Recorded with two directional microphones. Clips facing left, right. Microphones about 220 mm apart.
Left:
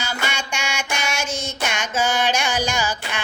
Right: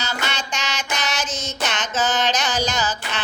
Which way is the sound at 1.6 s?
10° left (ahead or behind).